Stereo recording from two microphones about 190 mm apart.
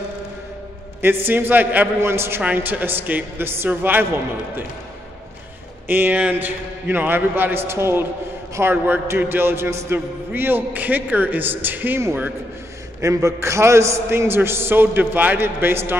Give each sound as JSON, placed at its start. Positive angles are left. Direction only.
{"t": 1.0, "sound": "a man's voice", "side_deg": -10}
{"t": 5.9, "sound": "a man's voice", "side_deg": -10}